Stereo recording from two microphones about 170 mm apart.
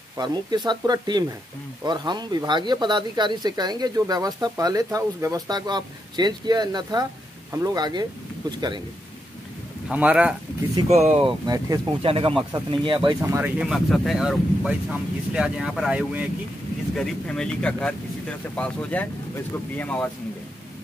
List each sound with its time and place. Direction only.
0.7 s speech: 25° right (ahead or behind)
9.8 s speech: 5° right (ahead or behind)
10.9 s speech: 40° right (ahead or behind)
13.2 s speech: 10° right (ahead or behind); by 20.1 s 10° left (ahead or behind)